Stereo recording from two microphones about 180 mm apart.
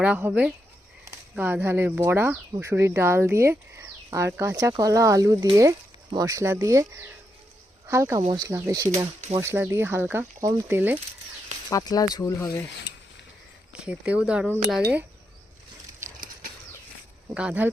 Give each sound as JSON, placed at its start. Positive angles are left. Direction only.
{"t": 0.0, "sound": "speech", "side_deg": -10}
{"t": 11.7, "sound": "speech", "side_deg": 20}
{"t": 13.7, "sound": "speech", "side_deg": -5}
{"t": 17.3, "sound": "speech", "side_deg": -5}